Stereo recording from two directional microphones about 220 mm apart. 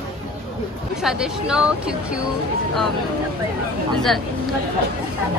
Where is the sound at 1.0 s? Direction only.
5° right (ahead or behind).